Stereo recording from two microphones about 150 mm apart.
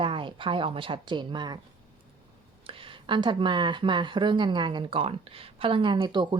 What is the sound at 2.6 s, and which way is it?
A woman's voice, 30° right (ahead or behind).